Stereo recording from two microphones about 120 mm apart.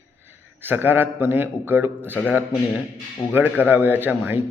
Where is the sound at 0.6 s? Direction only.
15° right (ahead or behind).